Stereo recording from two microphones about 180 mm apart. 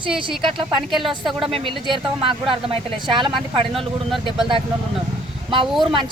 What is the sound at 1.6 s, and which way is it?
Speech, 30° right (ahead or behind).